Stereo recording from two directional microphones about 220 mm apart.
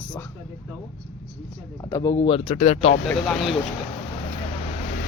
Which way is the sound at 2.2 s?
25° left (ahead or behind).